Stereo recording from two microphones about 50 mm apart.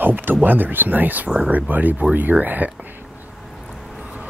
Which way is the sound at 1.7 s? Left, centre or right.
Right.